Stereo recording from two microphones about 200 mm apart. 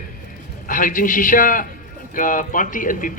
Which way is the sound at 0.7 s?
40° left (ahead or behind).